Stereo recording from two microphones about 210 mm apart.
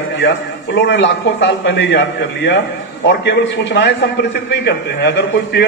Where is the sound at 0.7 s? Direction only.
55° left (ahead or behind).